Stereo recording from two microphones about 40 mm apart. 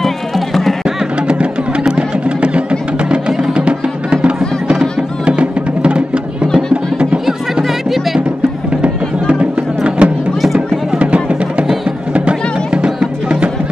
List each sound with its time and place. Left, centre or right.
0.8 s music: right
9.8 s music: right